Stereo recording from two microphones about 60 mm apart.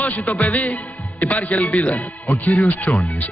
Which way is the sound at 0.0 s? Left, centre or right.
Left.